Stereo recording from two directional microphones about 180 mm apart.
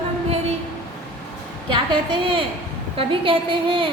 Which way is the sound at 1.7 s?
30° right (ahead or behind).